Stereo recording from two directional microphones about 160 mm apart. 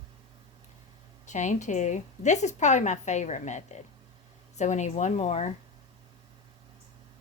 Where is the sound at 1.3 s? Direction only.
50° left (ahead or behind).